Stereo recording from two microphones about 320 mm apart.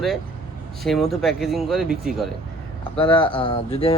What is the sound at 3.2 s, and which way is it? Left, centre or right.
Speech, centre.